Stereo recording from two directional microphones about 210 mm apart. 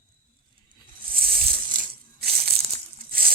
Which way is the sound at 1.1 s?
45° right (ahead or behind).